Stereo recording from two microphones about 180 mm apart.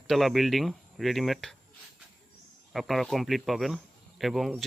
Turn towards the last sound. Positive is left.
turn(degrees=0)  # may be behind; listen again after turning